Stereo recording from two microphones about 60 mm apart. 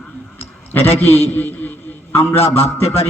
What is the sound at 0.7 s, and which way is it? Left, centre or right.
A man's voice, left.